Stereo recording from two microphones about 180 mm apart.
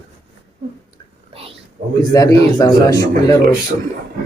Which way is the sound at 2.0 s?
20° left (ahead or behind).